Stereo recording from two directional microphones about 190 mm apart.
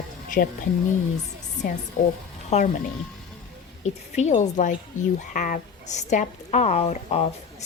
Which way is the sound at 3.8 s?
35° left (ahead or behind).